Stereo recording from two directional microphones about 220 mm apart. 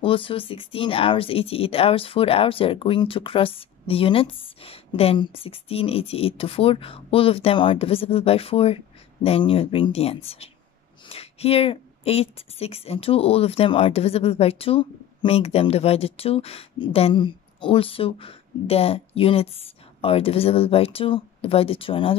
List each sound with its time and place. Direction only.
0.0 s speech: 25° left (ahead or behind)